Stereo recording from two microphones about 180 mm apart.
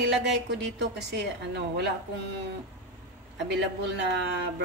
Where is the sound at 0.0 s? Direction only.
75° right (ahead or behind).